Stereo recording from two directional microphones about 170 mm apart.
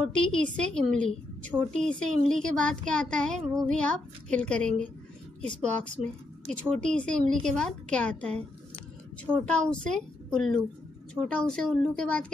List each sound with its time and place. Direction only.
0.0 s a woman's voice: 5° left (ahead or behind)